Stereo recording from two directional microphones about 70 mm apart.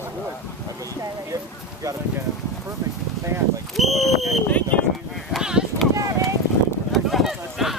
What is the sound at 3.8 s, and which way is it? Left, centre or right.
Speech, centre.